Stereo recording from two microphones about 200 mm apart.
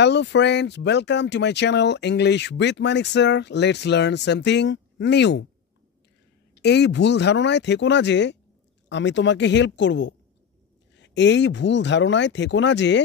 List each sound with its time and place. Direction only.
0.0 s speech: 60° left (ahead or behind)
6.5 s speech: 55° left (ahead or behind)